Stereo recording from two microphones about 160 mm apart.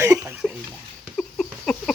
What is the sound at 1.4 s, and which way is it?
Patter, 5° left (ahead or behind).